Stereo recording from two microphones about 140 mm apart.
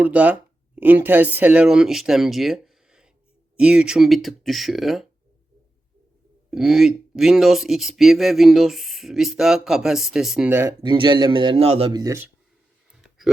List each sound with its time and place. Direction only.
0.0 s speech: 10° right (ahead or behind)
6.5 s speech: 5° right (ahead or behind)
10.5 s speech: 20° right (ahead or behind)
10.8 s a man's voice: 35° right (ahead or behind)
11.9 s speech: 25° right (ahead or behind)
12.9 s a sound: centre (ahead or behind)